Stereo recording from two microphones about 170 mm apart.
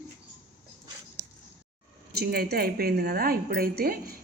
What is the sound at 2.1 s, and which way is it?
A woman's voice, 65° right (ahead or behind).